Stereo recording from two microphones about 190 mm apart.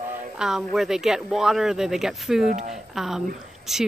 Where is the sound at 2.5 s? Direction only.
40° right (ahead or behind).